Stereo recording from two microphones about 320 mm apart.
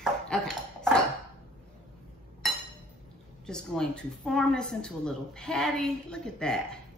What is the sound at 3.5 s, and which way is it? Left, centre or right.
A woman's voice, centre.